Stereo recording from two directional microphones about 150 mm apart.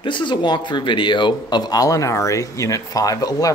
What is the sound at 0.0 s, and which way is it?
Speech, 30° left (ahead or behind).